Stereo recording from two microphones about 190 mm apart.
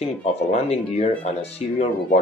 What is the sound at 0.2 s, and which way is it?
Speech, 35° left (ahead or behind).